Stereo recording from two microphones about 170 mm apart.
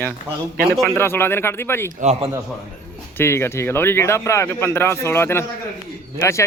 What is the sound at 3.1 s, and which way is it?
Speech, 15° left (ahead or behind).